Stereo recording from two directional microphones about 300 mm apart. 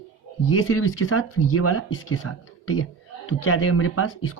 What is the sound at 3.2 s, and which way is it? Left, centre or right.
Speech, left.